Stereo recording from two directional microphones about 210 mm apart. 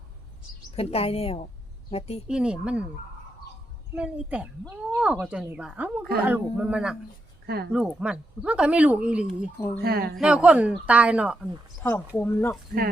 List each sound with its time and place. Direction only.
0.8 s a woman's voice: 30° left (ahead or behind)
2.2 s speech: 5° right (ahead or behind)
3.9 s speech: 5° right (ahead or behind)
7.4 s speech: 50° right (ahead or behind)
7.7 s speech: 5° right (ahead or behind)
9.8 s a woman's voice: 45° right (ahead or behind)
10.2 s speech: 5° right (ahead or behind)
11.8 s speech: 10° left (ahead or behind)